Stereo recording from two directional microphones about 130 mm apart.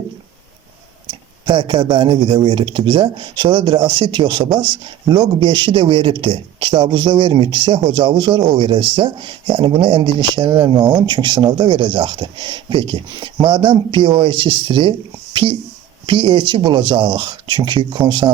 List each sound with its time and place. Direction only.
1.5 s a man's voice: 40° right (ahead or behind)